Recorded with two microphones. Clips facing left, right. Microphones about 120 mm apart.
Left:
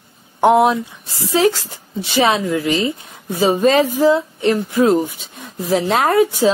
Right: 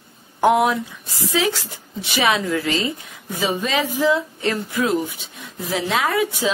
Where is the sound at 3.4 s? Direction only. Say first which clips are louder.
Left 8 dB; 40° left (ahead or behind).